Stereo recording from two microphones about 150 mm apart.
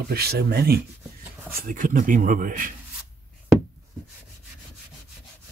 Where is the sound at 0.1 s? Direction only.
90° right.